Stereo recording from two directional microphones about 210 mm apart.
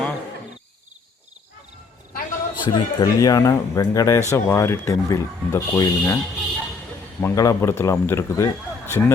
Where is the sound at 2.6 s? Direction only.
20° left (ahead or behind).